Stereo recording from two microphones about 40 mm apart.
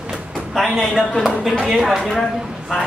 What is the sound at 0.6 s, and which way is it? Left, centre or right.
Speech, centre.